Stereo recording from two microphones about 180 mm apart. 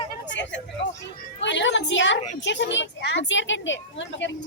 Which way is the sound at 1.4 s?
85° left.